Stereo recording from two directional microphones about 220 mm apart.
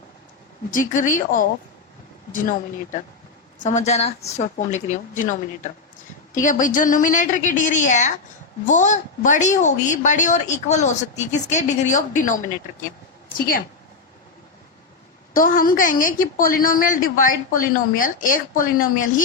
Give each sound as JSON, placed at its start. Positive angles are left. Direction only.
{"t": 0.7, "sound": "a woman's voice", "side_deg": 35}
{"t": 15.3, "sound": "a woman's voice", "side_deg": 40}